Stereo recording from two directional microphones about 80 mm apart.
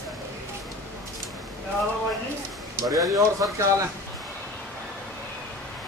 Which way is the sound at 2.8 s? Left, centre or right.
Right.